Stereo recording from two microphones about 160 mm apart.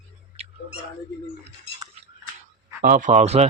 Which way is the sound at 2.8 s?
55° right (ahead or behind).